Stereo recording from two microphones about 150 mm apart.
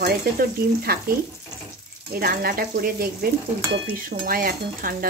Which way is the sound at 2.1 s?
80° right.